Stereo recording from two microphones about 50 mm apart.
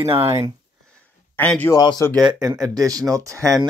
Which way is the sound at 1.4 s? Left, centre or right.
Left.